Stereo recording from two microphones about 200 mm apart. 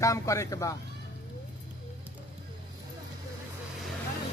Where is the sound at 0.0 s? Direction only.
15° left (ahead or behind).